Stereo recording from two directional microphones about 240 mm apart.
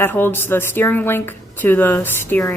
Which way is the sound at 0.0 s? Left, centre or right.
Centre.